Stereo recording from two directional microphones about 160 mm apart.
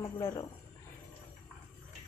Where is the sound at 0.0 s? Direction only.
25° left (ahead or behind).